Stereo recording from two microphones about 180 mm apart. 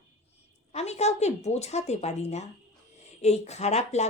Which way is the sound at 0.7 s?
35° left (ahead or behind).